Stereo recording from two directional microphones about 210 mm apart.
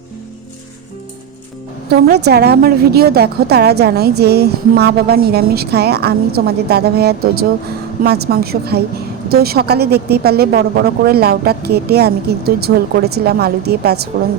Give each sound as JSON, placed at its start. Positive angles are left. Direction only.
{"t": 1.9, "sound": "a woman's voice", "side_deg": -50}